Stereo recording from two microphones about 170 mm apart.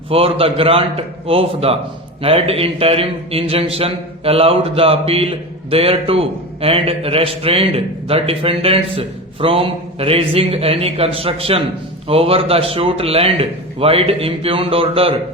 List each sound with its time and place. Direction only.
0.1 s a man's voice: 35° right (ahead or behind)